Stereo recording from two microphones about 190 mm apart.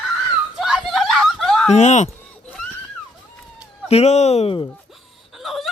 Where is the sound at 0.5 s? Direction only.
Centre (ahead or behind).